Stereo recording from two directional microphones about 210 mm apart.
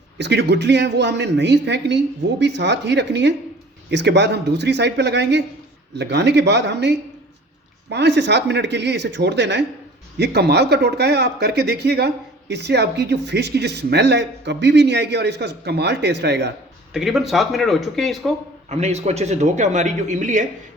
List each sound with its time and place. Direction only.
0.2 s speech: 55° right (ahead or behind)
16.9 s speech: centre (ahead or behind)
18.7 s a man's voice: 30° right (ahead or behind)